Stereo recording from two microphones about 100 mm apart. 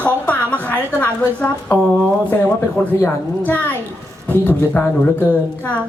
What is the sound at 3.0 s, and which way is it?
A woman's voice, 15° left (ahead or behind).